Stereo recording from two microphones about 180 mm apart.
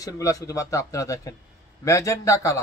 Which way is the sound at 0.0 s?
20° left (ahead or behind).